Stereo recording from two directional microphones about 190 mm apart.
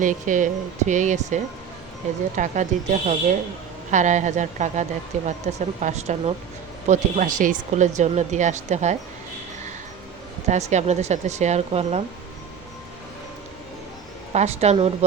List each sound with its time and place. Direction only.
0.0 s speech: 45° right (ahead or behind)
10.5 s speech: 35° right (ahead or behind)
14.3 s speech: 35° right (ahead or behind)